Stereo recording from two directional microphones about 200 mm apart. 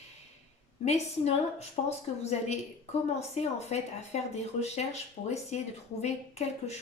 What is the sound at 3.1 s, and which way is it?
Speech, 35° left (ahead or behind).